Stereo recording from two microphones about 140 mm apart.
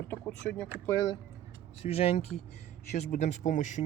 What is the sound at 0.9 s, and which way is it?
Speech, 25° left (ahead or behind).